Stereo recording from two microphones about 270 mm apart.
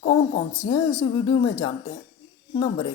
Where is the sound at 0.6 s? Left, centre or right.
Centre.